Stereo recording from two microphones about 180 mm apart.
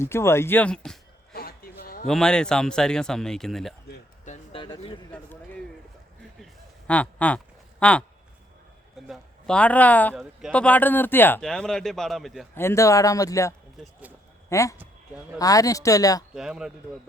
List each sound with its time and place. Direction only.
0.0 s speech: 15° left (ahead or behind)
1.3 s a sound: 55° left (ahead or behind)
2.0 s speech: 5° left (ahead or behind)
4.5 s speech: 30° left (ahead or behind)
5.1 s a sound: 10° left (ahead or behind)
9.0 s speech: centre (ahead or behind)
12.5 s speech: 15° left (ahead or behind)
13.8 s speech: 5° right (ahead or behind)
14.5 s speech: 15° left (ahead or behind)
14.8 s speech: 10° right (ahead or behind)
15.4 s speech: 20° left (ahead or behind)
16.3 s speech: 5° right (ahead or behind)